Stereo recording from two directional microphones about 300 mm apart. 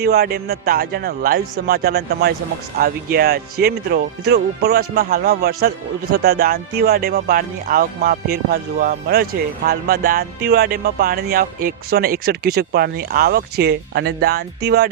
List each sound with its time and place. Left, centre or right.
0.0 s speech: right